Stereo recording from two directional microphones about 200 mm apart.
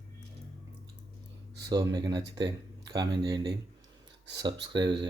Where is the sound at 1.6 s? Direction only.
20° right (ahead or behind).